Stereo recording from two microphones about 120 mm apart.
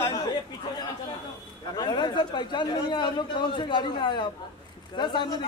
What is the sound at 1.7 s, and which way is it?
Speech, 35° left (ahead or behind).